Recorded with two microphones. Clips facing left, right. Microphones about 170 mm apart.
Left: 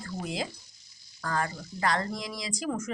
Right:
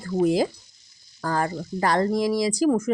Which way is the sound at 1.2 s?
35° right (ahead or behind).